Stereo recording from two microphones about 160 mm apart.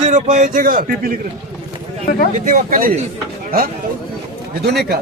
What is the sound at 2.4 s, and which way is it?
Speech, 60° right (ahead or behind).